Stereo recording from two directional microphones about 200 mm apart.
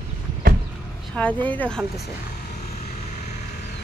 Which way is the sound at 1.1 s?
5° left (ahead or behind).